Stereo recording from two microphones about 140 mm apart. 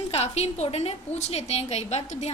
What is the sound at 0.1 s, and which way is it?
A woman's voice, 50° left (ahead or behind).